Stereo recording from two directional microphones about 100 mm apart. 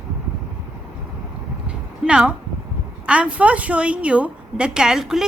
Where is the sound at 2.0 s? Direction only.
10° right (ahead or behind).